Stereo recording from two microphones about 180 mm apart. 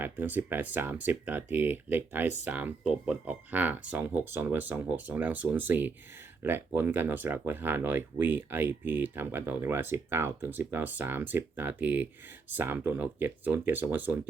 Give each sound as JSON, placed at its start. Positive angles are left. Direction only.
{"t": 0.0, "sound": "speech", "side_deg": -10}